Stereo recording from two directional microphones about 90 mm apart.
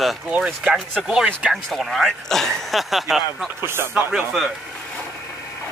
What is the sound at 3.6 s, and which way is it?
Speech, 25° right (ahead or behind).